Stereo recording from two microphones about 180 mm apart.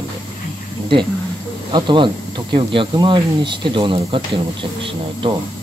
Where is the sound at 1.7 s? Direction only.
25° right (ahead or behind).